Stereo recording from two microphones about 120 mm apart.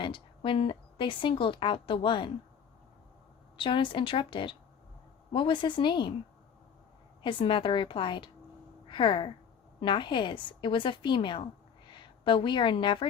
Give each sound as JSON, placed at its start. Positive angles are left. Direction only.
{"t": 0.0, "sound": "a woman's voice", "side_deg": 45}
{"t": 3.6, "sound": "a woman's voice", "side_deg": 45}
{"t": 7.2, "sound": "a woman's voice", "side_deg": 45}